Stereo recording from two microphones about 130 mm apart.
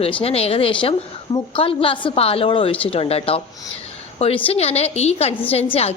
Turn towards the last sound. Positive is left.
turn(degrees=55)  # may be behind; listen again after turning